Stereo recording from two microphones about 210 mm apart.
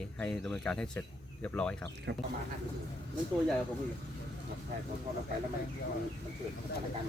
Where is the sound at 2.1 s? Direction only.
55° right (ahead or behind).